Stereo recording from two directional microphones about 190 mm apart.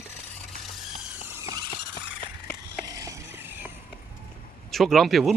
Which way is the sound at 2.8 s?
20° right (ahead or behind).